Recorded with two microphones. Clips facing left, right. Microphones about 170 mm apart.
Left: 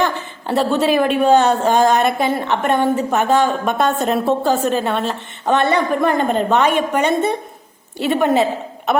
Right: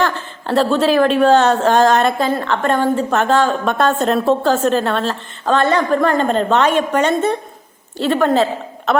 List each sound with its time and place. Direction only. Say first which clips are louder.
0.0 s a sound: right 1 dB; 15° left (ahead or behind)
0.8 s a woman's voice: right 3 dB; 10° left (ahead or behind)
3.9 s a woman's voice: right 2 dB; centre (ahead or behind)
4.3 s a woman's voice: right 3 dB; 15° left (ahead or behind)